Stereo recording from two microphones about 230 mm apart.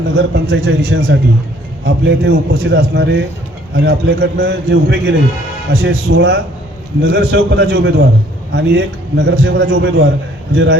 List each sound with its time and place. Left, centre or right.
0.2 s a man's voice: right